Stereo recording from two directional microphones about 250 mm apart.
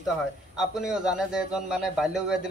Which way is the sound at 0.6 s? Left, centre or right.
Centre.